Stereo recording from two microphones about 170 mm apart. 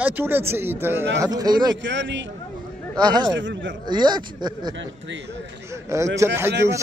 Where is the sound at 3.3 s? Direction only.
90° right.